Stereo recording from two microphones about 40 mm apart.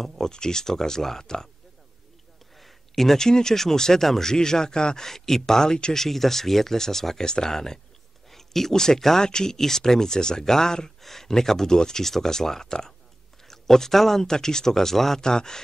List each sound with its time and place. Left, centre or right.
0.0 s speech: centre
2.5 s a sound: centre
3.3 s speech: centre
5.9 s speech: centre